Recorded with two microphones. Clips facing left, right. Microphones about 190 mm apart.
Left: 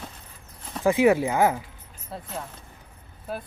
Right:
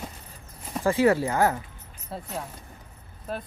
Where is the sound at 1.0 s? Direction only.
15° left (ahead or behind).